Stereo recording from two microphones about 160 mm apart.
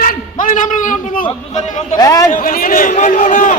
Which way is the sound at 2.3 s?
60° left (ahead or behind).